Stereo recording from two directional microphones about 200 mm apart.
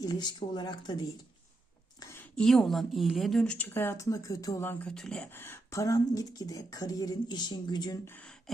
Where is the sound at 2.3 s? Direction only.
5° left (ahead or behind).